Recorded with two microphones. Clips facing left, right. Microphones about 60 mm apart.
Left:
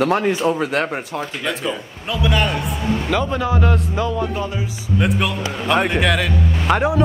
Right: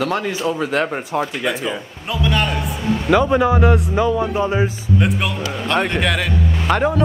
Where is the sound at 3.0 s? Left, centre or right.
Centre.